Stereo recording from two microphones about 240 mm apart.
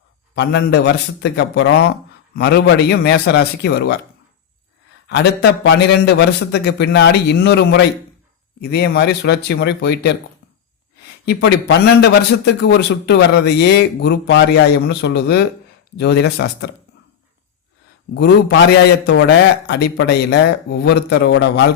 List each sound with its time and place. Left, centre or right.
0.3 s a man's voice: left
5.0 s a man's voice: left
11.3 s a man's voice: left
18.1 s a man's voice: left